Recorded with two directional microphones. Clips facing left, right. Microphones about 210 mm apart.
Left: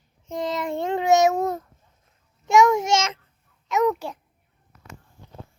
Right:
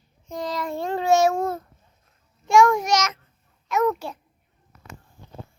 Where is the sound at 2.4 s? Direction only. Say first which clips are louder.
Even; 20° left (ahead or behind).